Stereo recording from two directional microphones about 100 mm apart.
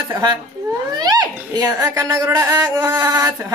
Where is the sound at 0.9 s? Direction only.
40° right (ahead or behind).